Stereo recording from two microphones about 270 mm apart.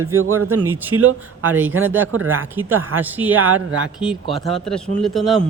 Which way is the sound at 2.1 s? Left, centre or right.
Right.